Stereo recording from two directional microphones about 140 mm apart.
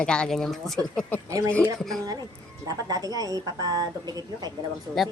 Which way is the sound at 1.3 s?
25° right (ahead or behind).